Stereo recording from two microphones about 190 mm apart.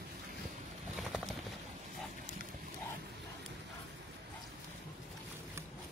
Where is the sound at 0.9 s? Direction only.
Centre (ahead or behind).